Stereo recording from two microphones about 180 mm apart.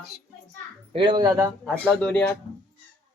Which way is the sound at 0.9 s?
25° right (ahead or behind).